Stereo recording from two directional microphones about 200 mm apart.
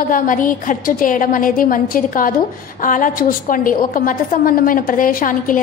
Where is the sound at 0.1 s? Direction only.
45° left (ahead or behind).